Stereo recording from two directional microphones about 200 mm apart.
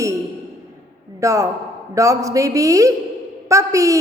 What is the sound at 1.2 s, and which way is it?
Speech, 15° right (ahead or behind).